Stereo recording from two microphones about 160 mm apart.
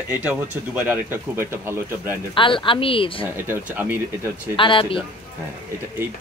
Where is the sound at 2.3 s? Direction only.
30° left (ahead or behind).